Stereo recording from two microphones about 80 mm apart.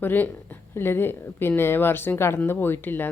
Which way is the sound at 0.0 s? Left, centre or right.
Left.